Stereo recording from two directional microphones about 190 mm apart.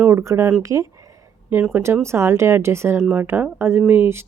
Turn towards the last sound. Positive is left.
turn(degrees=-10)  # may be behind; listen again after turning